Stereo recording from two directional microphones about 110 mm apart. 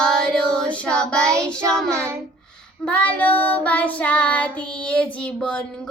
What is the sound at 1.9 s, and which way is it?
Speech, 25° right (ahead or behind).